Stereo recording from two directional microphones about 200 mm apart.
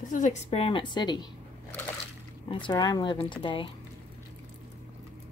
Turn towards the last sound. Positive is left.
turn(degrees=25)  # may be behind; listen again after turning